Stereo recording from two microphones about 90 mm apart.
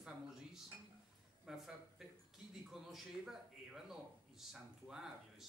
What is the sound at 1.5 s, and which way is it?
A man's voice, 5° right (ahead or behind).